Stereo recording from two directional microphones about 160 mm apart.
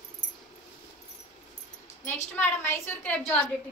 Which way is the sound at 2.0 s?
15° left (ahead or behind).